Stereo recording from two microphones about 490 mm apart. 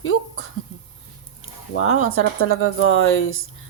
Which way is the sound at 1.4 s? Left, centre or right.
Left.